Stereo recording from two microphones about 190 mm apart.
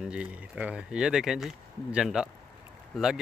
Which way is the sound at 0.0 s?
5° right (ahead or behind).